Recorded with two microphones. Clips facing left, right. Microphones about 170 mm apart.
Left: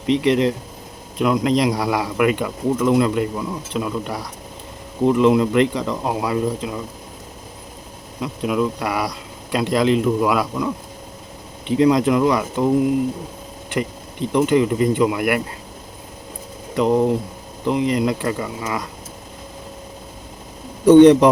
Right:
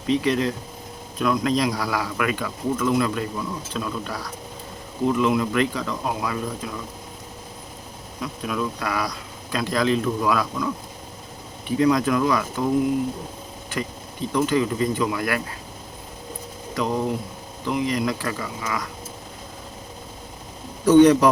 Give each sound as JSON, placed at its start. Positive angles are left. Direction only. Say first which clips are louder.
{"t": 0.1, "sound": "speech", "louder": "left 5 dB", "side_deg": 25}
{"t": 8.2, "sound": "speech", "louder": "left 6 dB", "side_deg": 20}
{"t": 11.7, "sound": "speech", "louder": "left 4 dB", "side_deg": 25}
{"t": 13.7, "sound": "speech", "louder": "left 5 dB", "side_deg": 25}
{"t": 16.7, "sound": "speech", "louder": "left 7 dB", "side_deg": 25}
{"t": 20.8, "sound": "speech", "louder": "left 5 dB", "side_deg": 25}